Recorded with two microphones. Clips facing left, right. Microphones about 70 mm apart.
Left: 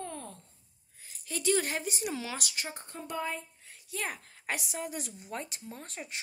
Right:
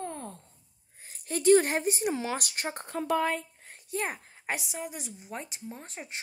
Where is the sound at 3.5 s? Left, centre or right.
Right.